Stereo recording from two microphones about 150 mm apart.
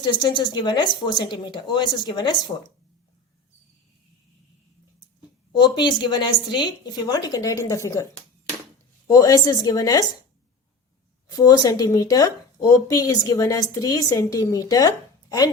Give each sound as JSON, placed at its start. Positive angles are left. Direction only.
{"t": 0.0, "sound": "a woman's voice", "side_deg": 30}
{"t": 5.5, "sound": "a woman's voice", "side_deg": 30}
{"t": 9.0, "sound": "a woman's voice", "side_deg": 25}
{"t": 11.3, "sound": "a woman's voice", "side_deg": 25}